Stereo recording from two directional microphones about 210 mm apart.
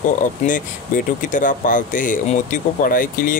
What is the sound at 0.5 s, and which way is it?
Speech, 40° left (ahead or behind).